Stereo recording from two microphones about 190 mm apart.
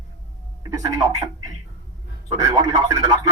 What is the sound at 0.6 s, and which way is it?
Speech, 20° right (ahead or behind).